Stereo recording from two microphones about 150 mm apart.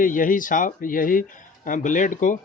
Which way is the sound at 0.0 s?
65° left (ahead or behind).